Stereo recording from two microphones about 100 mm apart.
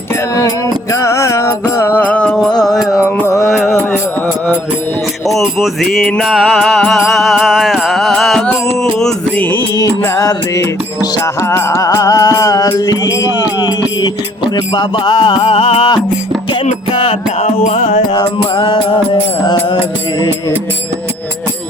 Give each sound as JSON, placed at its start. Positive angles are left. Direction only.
{"t": 0.9, "sound": "music", "side_deg": 30}
{"t": 5.3, "sound": "mantra", "side_deg": 0}
{"t": 6.3, "sound": "music", "side_deg": -5}
{"t": 10.0, "sound": "music", "side_deg": 30}
{"t": 16.9, "sound": "music", "side_deg": 70}
{"t": 18.1, "sound": "music", "side_deg": 45}